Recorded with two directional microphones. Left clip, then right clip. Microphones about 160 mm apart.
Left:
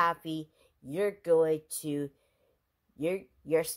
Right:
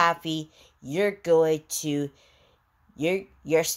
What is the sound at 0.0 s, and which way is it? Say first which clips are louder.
A woman's voice: right 6 dB; 5° left (ahead or behind).